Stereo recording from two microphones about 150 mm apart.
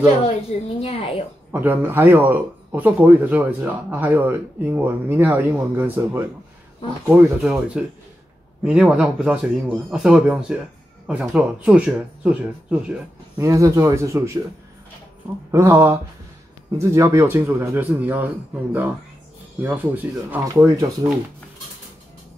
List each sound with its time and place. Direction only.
0.0 s a woman's voice: 40° left (ahead or behind)
1.5 s speech: 15° right (ahead or behind)
13.4 s speech: 20° right (ahead or behind)
15.5 s speech: 15° right (ahead or behind)